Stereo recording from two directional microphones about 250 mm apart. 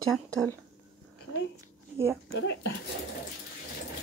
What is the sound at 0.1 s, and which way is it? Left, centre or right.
Speech, centre.